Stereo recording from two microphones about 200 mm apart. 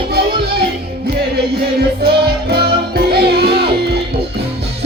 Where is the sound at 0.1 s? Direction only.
50° right (ahead or behind).